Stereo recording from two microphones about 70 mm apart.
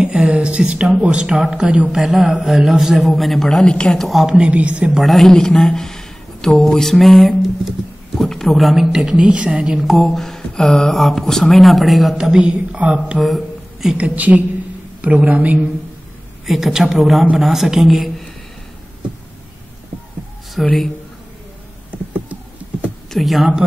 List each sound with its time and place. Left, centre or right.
0.0 s a man's voice: centre
4.5 s a woman's voice: centre
4.9 s speech: centre
9.8 s a man's voice: centre
13.2 s a sound: centre
13.9 s a woman's voice: right
16.4 s a man's voice: centre
20.6 s a man's voice: centre
21.9 s computer keyboard: right
23.0 s a woman's voice: centre